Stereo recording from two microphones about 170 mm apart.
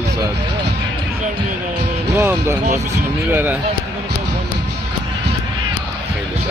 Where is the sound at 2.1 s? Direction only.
15° right (ahead or behind).